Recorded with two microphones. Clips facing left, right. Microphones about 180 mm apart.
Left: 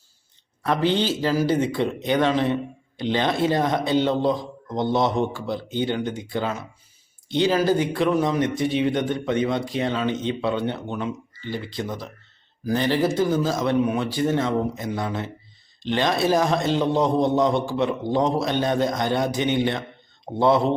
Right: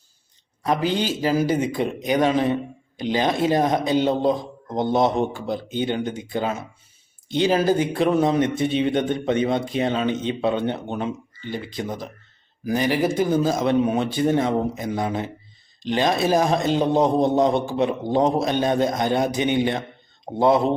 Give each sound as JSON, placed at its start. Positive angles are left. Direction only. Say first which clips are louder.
{"t": 0.7, "sound": "a man's voice", "louder": "left 1 dB", "side_deg": -10}